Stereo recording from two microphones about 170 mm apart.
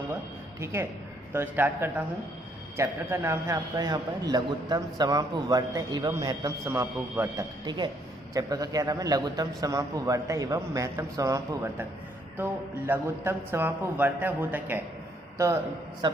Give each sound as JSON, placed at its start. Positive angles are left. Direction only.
{"t": 0.6, "sound": "a man's voice", "side_deg": -15}
{"t": 7.6, "sound": "a man's voice", "side_deg": -25}
{"t": 16.0, "sound": "a man's voice", "side_deg": -25}